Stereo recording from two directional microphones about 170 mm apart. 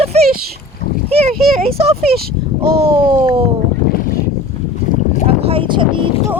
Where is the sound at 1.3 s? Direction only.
Centre (ahead or behind).